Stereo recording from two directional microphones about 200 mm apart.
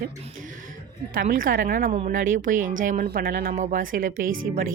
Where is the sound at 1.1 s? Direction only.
45° right (ahead or behind).